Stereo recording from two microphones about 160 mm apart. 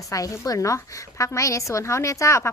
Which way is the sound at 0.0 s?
20° left (ahead or behind).